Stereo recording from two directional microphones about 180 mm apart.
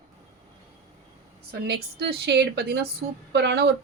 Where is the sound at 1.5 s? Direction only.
70° right (ahead or behind).